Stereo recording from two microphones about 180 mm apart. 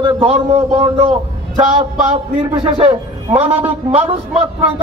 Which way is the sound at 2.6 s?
30° right (ahead or behind).